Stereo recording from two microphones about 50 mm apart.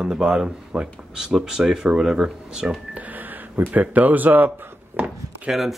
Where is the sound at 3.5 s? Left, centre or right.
Right.